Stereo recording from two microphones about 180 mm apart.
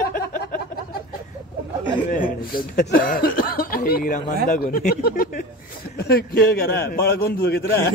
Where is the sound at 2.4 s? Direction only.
55° left (ahead or behind).